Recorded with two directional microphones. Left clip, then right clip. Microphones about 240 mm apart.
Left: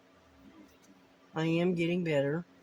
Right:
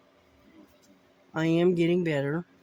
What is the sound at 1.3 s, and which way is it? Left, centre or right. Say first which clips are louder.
Speech: right 6 dB; right.